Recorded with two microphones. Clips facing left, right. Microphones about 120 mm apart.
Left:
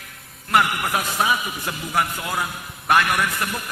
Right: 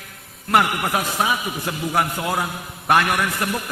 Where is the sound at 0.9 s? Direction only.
25° right (ahead or behind).